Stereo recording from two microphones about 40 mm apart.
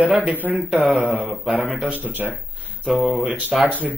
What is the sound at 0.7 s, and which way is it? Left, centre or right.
Speech, right.